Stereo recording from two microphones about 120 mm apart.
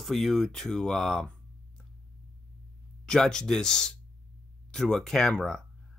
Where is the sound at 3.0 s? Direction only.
5° left (ahead or behind).